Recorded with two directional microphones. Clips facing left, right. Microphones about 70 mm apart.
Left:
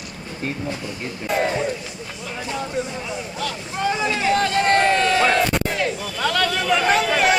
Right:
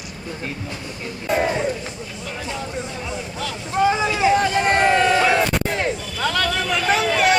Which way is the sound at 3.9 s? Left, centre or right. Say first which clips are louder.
Right 1 dB; centre.